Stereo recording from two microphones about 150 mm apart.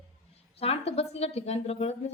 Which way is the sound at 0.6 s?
40° left (ahead or behind).